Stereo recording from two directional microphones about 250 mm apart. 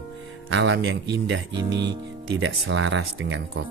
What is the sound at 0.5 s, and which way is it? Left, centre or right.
Speech, right.